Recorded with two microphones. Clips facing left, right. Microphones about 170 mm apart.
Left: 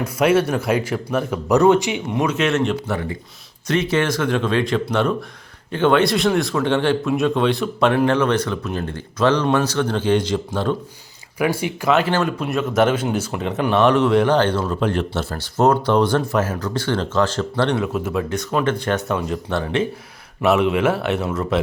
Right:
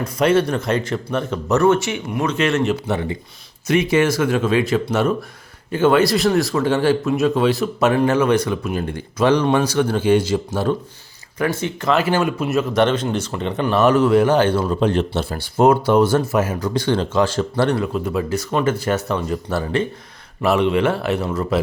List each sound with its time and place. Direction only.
0.0 s speech: 5° left (ahead or behind)
2.3 s a man's voice: centre (ahead or behind)
2.8 s speech: 25° right (ahead or behind)
3.7 s a man's voice: 10° right (ahead or behind)
11.3 s speech: 10° left (ahead or behind)
11.9 s a man's voice: 10° right (ahead or behind)